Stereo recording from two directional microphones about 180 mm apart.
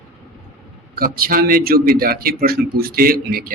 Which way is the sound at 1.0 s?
55° right (ahead or behind).